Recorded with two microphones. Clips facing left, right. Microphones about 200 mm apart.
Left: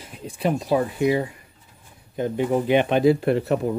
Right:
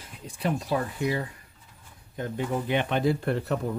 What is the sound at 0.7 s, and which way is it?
Speech, 20° left (ahead or behind).